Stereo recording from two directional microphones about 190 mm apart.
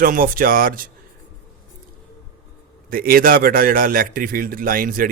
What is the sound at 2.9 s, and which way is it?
Speech, 50° right (ahead or behind).